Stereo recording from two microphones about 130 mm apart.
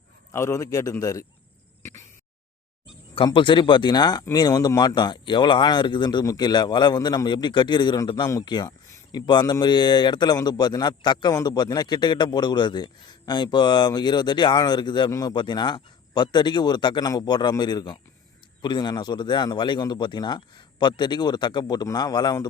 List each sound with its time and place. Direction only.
0.3 s a man's voice: 20° left (ahead or behind)
1.8 s a sound: 20° left (ahead or behind)
3.2 s speech: 40° left (ahead or behind)